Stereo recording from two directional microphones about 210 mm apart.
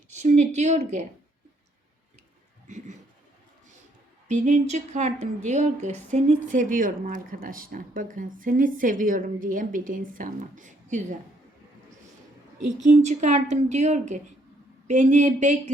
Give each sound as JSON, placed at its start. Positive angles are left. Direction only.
{"t": 0.1, "sound": "a woman's voice", "side_deg": -35}
{"t": 2.6, "sound": "a sound", "side_deg": -35}
{"t": 4.3, "sound": "a woman's voice", "side_deg": -35}
{"t": 12.8, "sound": "a woman's voice", "side_deg": -35}